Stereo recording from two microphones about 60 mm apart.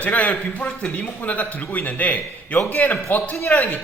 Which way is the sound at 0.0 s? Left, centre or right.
Left.